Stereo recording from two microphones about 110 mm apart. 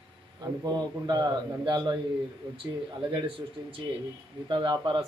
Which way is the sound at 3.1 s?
50° right (ahead or behind).